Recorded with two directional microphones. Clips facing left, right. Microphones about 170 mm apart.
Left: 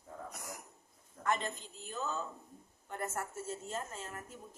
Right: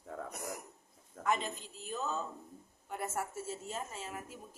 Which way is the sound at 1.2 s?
90° right.